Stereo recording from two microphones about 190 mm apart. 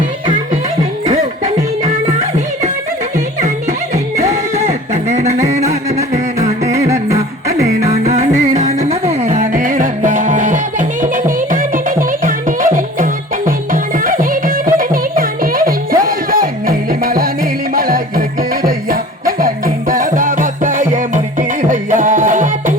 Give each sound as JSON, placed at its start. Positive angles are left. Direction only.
{"t": 1.0, "sound": "music", "side_deg": -40}
{"t": 3.4, "sound": "music", "side_deg": -35}
{"t": 6.8, "sound": "music", "side_deg": -15}
{"t": 7.8, "sound": "music", "side_deg": -35}